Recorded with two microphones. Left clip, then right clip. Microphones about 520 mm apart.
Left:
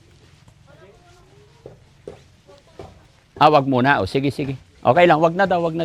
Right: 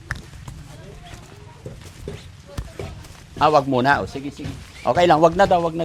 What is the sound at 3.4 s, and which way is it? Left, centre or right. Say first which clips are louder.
Speech: left 2 dB; left.